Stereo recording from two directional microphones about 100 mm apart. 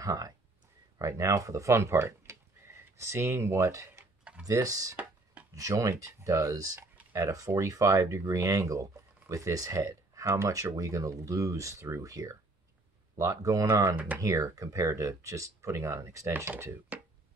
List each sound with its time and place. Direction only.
0.0 s speech: 35° right (ahead or behind)
4.2 s typing: 10° right (ahead or behind)
4.5 s speech: 35° right (ahead or behind)
13.9 s speech: 15° right (ahead or behind)
14.2 s speech: 30° right (ahead or behind)